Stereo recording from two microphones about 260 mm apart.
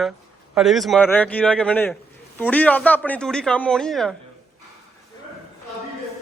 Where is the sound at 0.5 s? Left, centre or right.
Centre.